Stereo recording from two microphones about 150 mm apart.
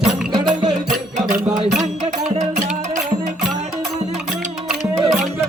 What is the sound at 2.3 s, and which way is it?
Music, 55° right (ahead or behind).